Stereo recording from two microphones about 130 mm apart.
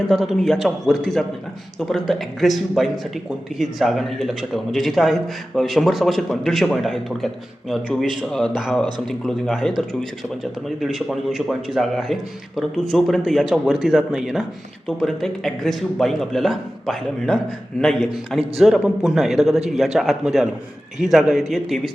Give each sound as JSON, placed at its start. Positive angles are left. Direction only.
{"t": 0.1, "sound": "a man's voice", "side_deg": 0}